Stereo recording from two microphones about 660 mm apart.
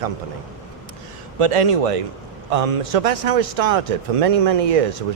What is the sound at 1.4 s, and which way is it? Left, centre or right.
A man's voice, right.